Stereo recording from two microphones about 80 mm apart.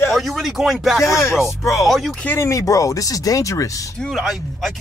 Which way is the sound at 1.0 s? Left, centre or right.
Left.